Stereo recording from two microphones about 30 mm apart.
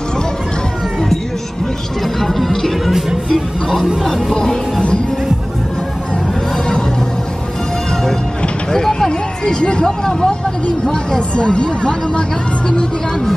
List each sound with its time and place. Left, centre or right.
2.1 s music: centre
4.0 s music: centre
8.7 s a sound: centre
9.6 s speech: left
9.8 s speech: centre
10.9 s speech: left